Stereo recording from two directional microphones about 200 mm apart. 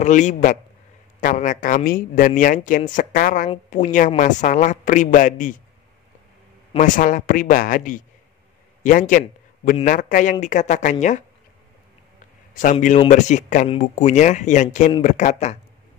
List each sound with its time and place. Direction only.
0.0 s speech: 35° left (ahead or behind)
6.8 s speech: 40° left (ahead or behind)
12.7 s speech: 35° left (ahead or behind)